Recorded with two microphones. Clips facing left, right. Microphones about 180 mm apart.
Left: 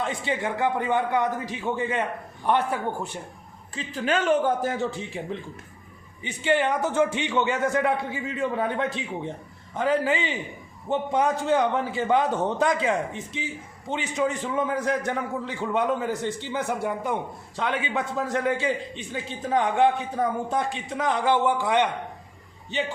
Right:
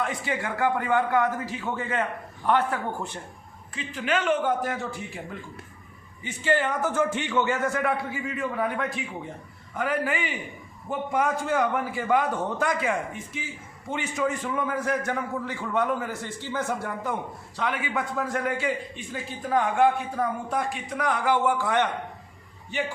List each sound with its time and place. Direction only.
0.0 s a man's voice: 25° left (ahead or behind)
3.8 s a man's voice: 35° left (ahead or behind); by 21.8 s 20° left (ahead or behind)